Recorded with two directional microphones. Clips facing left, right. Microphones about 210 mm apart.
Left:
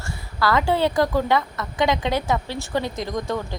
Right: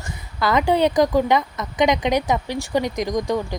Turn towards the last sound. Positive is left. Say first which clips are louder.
# right 4 dB
turn(degrees=-15)  # may be behind; listen again after turning